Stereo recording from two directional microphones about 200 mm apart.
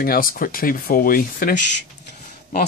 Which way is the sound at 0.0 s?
45° left (ahead or behind).